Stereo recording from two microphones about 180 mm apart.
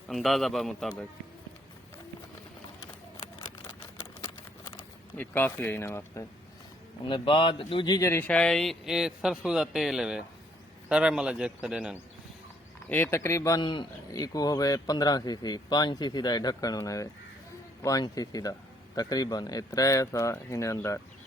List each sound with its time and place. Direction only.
0.1 s speech: centre (ahead or behind)
2.8 s a sound: 20° left (ahead or behind)
7.0 s speech: 25° left (ahead or behind); by 11.9 s 5° right (ahead or behind)
12.9 s speech: 15° left (ahead or behind)